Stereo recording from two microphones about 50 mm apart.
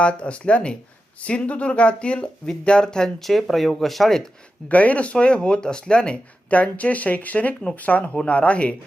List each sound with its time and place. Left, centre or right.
0.0 s speech: left
3.2 s speech: centre
4.7 s speech: left
6.5 s speech: left